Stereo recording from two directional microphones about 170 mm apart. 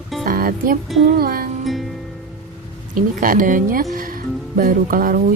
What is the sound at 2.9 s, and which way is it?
A woman's voice, 55° right (ahead or behind).